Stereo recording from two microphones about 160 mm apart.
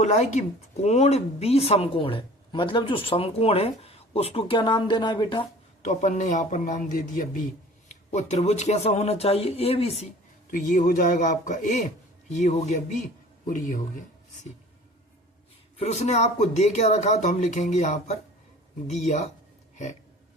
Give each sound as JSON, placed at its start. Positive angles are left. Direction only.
{"t": 0.0, "sound": "speech", "side_deg": 45}
{"t": 5.8, "sound": "speech", "side_deg": 50}
{"t": 7.9, "sound": "speech", "side_deg": 45}
{"t": 10.5, "sound": "speech", "side_deg": 55}
{"t": 15.8, "sound": "speech", "side_deg": 45}